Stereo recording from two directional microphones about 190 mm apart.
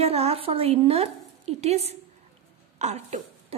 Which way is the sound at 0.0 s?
35° right (ahead or behind).